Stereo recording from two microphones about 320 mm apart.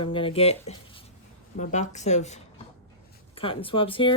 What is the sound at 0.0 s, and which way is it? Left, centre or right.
Speech, centre.